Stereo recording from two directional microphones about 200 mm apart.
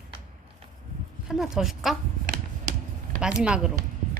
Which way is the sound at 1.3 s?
Centre (ahead or behind).